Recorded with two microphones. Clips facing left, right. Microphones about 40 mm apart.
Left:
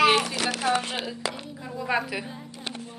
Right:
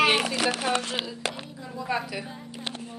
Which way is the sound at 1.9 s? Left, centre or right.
Left.